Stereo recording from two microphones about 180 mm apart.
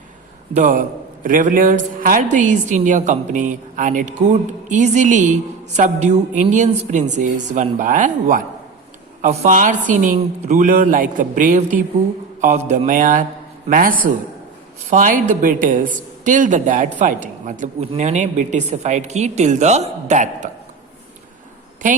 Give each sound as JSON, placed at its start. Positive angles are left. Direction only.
{"t": 0.5, "sound": "a man's voice", "side_deg": -50}